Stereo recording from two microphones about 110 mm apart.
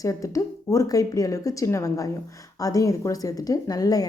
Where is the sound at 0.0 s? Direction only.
30° left (ahead or behind).